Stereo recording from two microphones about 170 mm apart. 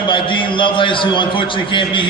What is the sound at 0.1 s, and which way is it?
A man's voice, 30° left (ahead or behind).